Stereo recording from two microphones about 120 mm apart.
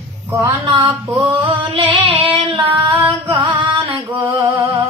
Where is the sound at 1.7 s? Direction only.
50° right (ahead or behind).